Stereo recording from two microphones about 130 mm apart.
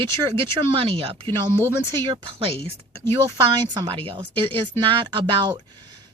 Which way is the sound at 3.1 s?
35° right (ahead or behind).